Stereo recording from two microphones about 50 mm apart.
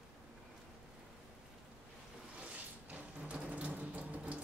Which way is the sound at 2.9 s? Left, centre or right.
Right.